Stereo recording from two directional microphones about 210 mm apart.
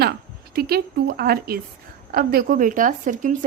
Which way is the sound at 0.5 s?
45° right (ahead or behind).